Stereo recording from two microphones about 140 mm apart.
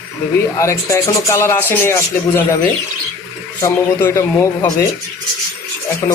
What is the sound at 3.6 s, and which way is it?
Speech, 20° left (ahead or behind).